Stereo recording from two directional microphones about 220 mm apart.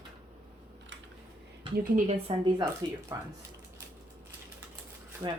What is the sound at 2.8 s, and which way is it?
Speech, 20° right (ahead or behind).